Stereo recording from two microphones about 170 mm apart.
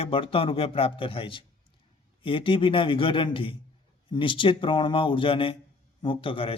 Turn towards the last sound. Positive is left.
turn(degrees=30)  # may be behind; listen again after turning